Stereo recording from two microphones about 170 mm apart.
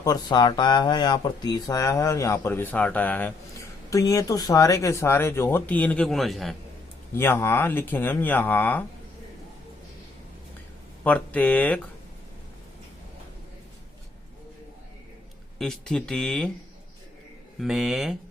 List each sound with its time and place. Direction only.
0.0 s speech: 25° left (ahead or behind); by 6.6 s centre (ahead or behind)
7.1 s speech: 15° left (ahead or behind)
11.0 s speech: 10° left (ahead or behind)
15.5 s speech: 5° left (ahead or behind)
17.6 s speech: centre (ahead or behind)